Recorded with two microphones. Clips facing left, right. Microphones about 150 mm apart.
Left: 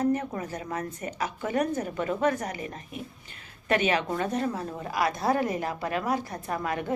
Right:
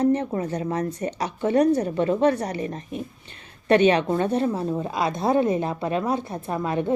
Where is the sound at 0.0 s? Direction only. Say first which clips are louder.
Right 5 dB; 30° right (ahead or behind).